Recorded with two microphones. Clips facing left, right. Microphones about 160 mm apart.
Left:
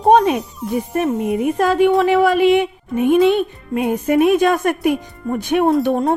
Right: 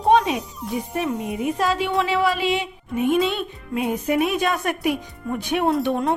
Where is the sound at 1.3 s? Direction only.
55° left (ahead or behind).